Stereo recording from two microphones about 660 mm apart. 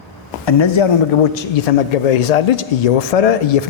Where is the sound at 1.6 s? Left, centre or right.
Left.